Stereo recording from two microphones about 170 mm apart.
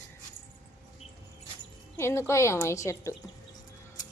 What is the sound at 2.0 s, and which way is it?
A woman's voice, 15° left (ahead or behind).